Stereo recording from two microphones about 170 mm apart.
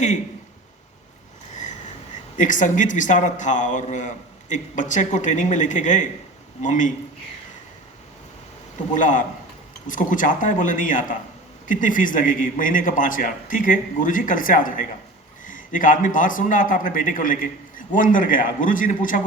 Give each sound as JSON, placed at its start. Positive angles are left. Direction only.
{"t": 2.4, "sound": "a man's voice", "side_deg": 50}
{"t": 8.9, "sound": "a man's voice", "side_deg": 50}